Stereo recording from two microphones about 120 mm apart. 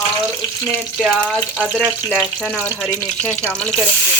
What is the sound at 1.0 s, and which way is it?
Speech, 5° left (ahead or behind).